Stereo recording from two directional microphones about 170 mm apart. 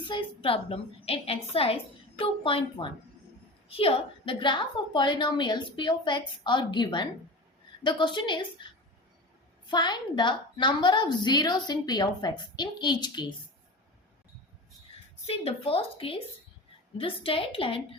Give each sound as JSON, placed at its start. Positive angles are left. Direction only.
{"t": 0.1, "sound": "a woman's voice", "side_deg": 30}
{"t": 9.6, "sound": "a woman's voice", "side_deg": 25}
{"t": 15.3, "sound": "a woman's voice", "side_deg": 35}